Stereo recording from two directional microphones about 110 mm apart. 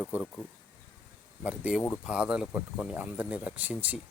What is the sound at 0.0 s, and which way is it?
Speech, 10° right (ahead or behind).